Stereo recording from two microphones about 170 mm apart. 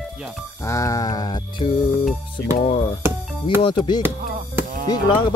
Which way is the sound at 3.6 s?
30° left (ahead or behind).